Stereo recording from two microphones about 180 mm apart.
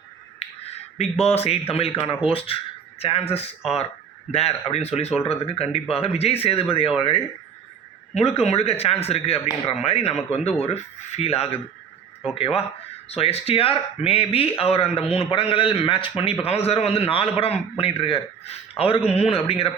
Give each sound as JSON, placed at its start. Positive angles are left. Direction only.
{"t": 0.4, "sound": "finger snapping", "side_deg": 35}
{"t": 0.9, "sound": "a man's voice", "side_deg": 35}